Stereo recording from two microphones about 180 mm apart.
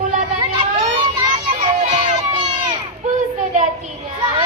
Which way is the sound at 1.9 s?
40° right (ahead or behind).